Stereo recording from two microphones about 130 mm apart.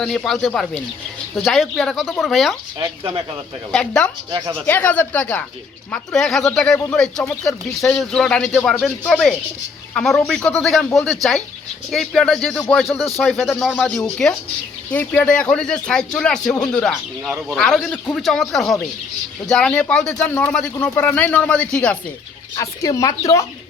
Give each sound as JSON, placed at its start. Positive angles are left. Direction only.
{"t": 0.0, "sound": "speech", "side_deg": 5}
{"t": 3.7, "sound": "speech", "side_deg": 5}
{"t": 22.5, "sound": "speech", "side_deg": 25}